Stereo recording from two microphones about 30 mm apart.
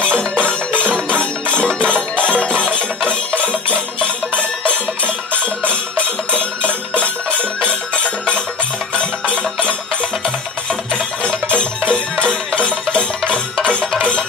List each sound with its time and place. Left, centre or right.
0.1 s music: left
6.9 s music: left
11.2 s music: left